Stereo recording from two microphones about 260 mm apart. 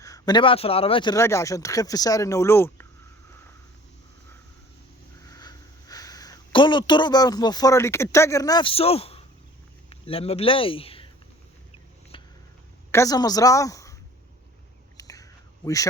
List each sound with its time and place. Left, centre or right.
0.0 s speech: centre
5.2 s a man's voice: centre
12.1 s music: centre
12.9 s speech: centre
14.9 s a sound: centre